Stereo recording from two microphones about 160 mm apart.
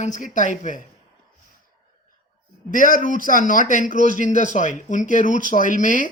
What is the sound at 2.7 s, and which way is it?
Speech, 55° left (ahead or behind).